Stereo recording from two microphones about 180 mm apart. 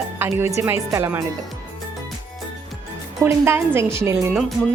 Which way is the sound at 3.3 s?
15° right (ahead or behind).